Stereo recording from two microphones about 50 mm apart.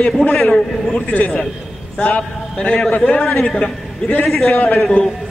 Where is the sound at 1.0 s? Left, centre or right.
Left.